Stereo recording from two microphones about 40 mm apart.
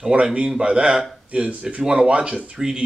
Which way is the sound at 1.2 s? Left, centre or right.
Right.